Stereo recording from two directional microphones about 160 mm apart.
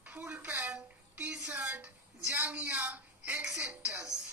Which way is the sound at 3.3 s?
10° right (ahead or behind).